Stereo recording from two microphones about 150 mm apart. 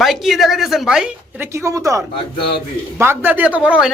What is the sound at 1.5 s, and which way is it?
Speech, 20° right (ahead or behind).